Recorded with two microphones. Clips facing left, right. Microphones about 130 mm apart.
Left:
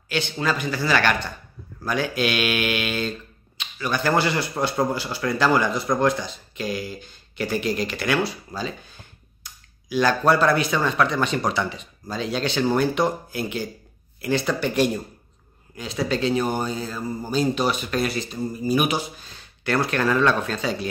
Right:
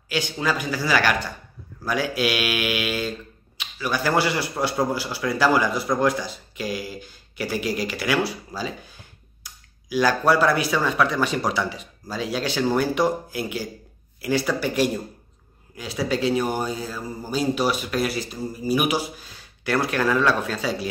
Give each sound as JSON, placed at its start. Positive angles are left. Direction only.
{"t": 0.1, "sound": "speech", "side_deg": -10}